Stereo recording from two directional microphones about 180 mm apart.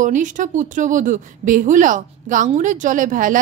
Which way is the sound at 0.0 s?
45° right (ahead or behind).